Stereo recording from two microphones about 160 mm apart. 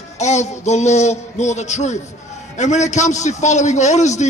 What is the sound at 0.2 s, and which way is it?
A man's voice, 45° left (ahead or behind).